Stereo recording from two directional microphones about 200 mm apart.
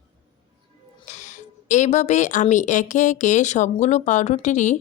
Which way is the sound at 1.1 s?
35° left (ahead or behind).